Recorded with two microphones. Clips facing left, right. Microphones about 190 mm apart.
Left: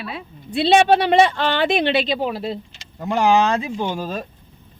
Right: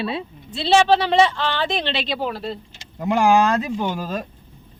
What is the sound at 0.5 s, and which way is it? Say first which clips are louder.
Speech: left 2 dB; 60° left (ahead or behind).